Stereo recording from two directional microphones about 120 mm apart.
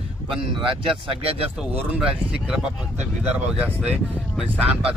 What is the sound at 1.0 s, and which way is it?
Speech, 55° right (ahead or behind).